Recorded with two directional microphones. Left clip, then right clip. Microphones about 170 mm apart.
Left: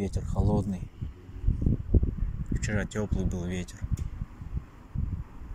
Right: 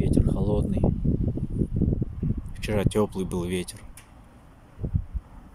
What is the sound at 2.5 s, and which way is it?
Speech, 30° right (ahead or behind).